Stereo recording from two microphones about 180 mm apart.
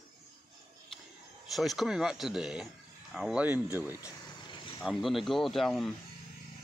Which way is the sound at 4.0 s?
25° left (ahead or behind).